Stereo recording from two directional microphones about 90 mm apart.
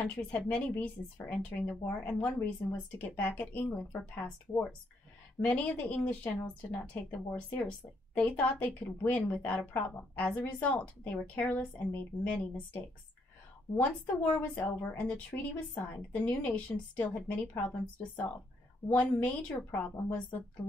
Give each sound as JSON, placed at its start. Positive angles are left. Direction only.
{"t": 0.0, "sound": "a woman's voice", "side_deg": 15}
{"t": 14.1, "sound": "a woman's voice", "side_deg": 10}